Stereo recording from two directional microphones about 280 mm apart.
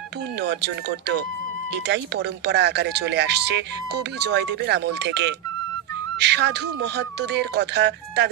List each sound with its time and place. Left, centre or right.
0.4 s speech: right